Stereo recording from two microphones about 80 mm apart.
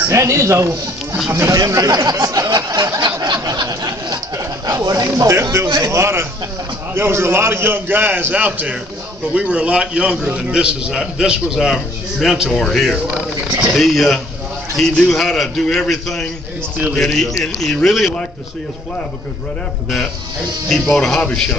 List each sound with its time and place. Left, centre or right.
0.1 s speech: right
1.6 s speech: right
4.6 s a man's voice: right; by 12.9 s centre
12.9 s speech: centre
13.7 s a man's voice: centre
20.6 s speech: centre